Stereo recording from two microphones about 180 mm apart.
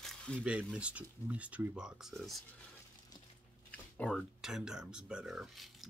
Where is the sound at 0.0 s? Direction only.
5° left (ahead or behind).